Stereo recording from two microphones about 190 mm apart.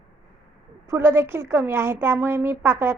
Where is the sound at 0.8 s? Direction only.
15° right (ahead or behind).